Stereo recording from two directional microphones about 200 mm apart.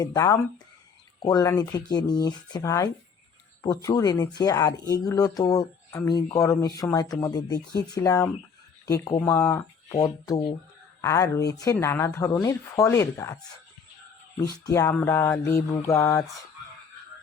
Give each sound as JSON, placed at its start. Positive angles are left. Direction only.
{"t": 0.0, "sound": "speech", "side_deg": 15}
{"t": 14.7, "sound": "speech", "side_deg": 15}